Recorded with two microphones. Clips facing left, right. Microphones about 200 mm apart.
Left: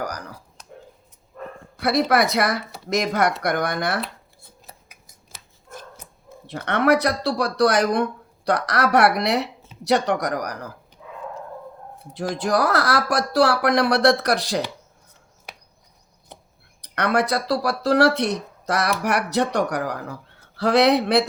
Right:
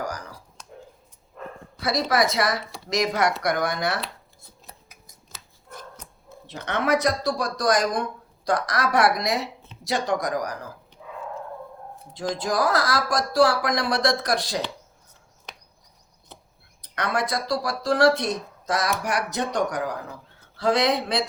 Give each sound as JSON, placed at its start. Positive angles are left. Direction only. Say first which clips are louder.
{"t": 1.8, "sound": "a woman's voice", "louder": "left 4 dB", "side_deg": 60}
{"t": 4.7, "sound": "scissors", "louder": "left 1 dB", "side_deg": 5}
{"t": 6.5, "sound": "a woman's voice", "louder": "left 4 dB", "side_deg": 60}
{"t": 12.3, "sound": "speech", "louder": "left 2 dB", "side_deg": 65}
{"t": 15.5, "sound": "chop", "louder": "left 1 dB", "side_deg": 10}
{"t": 16.8, "sound": "speech", "louder": "left 5 dB", "side_deg": 65}